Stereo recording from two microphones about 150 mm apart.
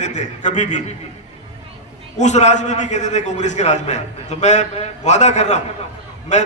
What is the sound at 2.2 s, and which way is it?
A man's voice, 50° left (ahead or behind).